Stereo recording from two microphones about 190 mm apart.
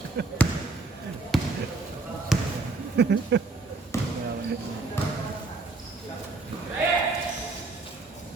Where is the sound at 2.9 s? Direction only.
65° right (ahead or behind).